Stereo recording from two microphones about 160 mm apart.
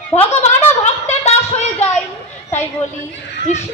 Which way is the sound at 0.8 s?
45° left (ahead or behind).